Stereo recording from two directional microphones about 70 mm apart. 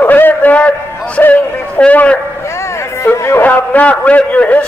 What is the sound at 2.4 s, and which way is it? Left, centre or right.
Bow-wow, left.